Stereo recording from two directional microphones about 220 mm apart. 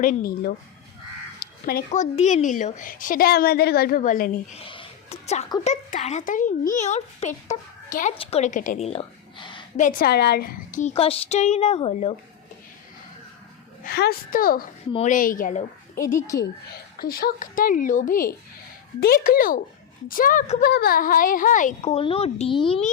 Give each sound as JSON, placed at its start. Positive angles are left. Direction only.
{"t": 0.0, "sound": "speech", "side_deg": 40}
{"t": 4.6, "sound": "a sound", "side_deg": 25}
{"t": 5.6, "sound": "speech", "side_deg": 30}
{"t": 9.7, "sound": "speech", "side_deg": 35}
{"t": 13.8, "sound": "speech", "side_deg": 45}
{"t": 16.0, "sound": "a woman's voice", "side_deg": 15}
{"t": 17.0, "sound": "speech", "side_deg": 40}